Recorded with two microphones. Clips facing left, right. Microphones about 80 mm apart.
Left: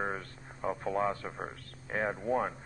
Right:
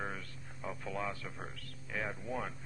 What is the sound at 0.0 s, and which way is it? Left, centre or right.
Speech, left.